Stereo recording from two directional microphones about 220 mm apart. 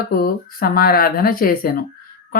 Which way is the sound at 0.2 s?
40° left (ahead or behind).